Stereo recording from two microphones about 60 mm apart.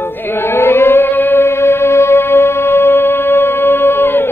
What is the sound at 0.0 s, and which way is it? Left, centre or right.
Chant, left.